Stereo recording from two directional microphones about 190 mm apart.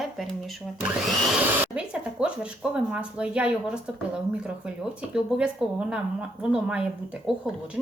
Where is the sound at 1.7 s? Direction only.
5° right (ahead or behind).